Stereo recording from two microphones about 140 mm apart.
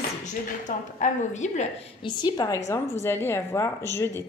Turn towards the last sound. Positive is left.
turn(degrees=20)  # may be behind; listen again after turning